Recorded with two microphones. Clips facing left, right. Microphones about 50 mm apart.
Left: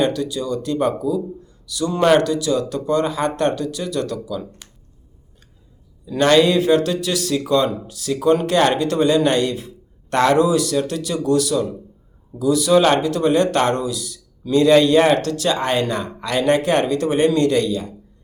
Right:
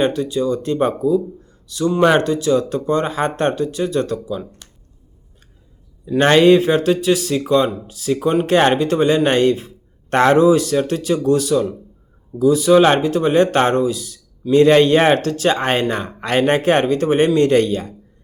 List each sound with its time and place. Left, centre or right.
0.0 s a man's voice: right
1.9 s speech: centre
2.2 s a man's voice: right
6.1 s a man's voice: right
17.5 s speech: right